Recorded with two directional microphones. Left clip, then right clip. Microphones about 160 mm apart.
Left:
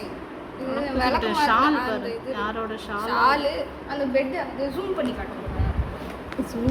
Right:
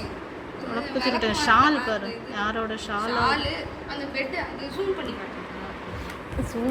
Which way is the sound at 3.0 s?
90° left.